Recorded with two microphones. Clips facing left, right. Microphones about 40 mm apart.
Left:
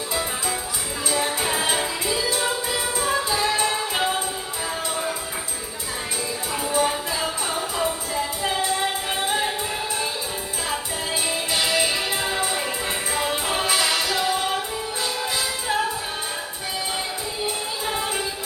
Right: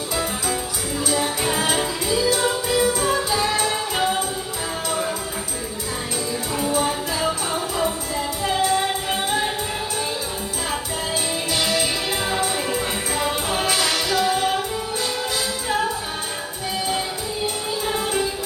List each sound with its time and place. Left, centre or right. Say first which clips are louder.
0.1 s music: right 2 dB; centre
1.7 s music: right 2 dB; centre
6.7 s music: left 3 dB; centre
8.1 s music: right 1 dB; centre
11.5 s music: even; left
13.1 s music: right 1 dB; centre
14.3 s music: right 3 dB; centre
17.8 s music: right 3 dB; centre